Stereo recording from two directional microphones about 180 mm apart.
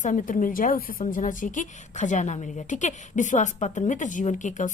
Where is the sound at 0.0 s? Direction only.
45° left (ahead or behind).